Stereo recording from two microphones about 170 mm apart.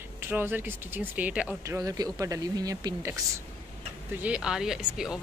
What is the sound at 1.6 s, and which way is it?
Speech, 20° right (ahead or behind).